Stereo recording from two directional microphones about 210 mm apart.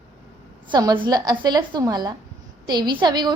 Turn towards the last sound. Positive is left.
turn(degrees=-20)  # may be behind; listen again after turning